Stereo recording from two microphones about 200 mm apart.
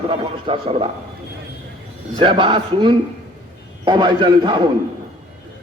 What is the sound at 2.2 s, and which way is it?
A man's voice, 25° right (ahead or behind).